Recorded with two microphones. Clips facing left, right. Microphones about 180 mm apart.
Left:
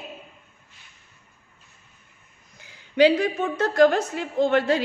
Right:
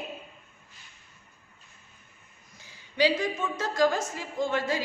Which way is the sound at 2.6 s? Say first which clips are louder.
Left 8 dB; 60° left (ahead or behind).